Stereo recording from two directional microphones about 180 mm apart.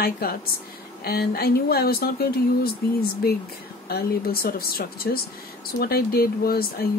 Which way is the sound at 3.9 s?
55° left (ahead or behind).